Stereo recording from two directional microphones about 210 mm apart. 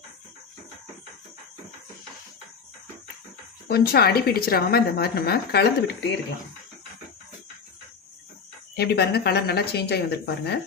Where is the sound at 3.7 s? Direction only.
50° left (ahead or behind).